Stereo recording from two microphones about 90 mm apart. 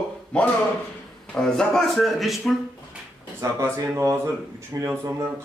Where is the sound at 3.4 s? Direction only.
35° right (ahead or behind).